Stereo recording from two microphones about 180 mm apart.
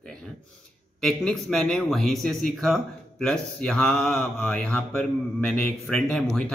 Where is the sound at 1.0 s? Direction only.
5° left (ahead or behind).